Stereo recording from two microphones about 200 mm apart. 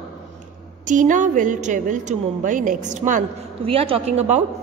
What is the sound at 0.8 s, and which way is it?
A woman's voice, 40° right (ahead or behind).